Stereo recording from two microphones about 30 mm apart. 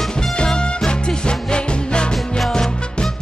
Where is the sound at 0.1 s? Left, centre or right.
Left.